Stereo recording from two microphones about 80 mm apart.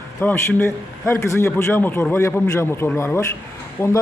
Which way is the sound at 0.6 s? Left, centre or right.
Left.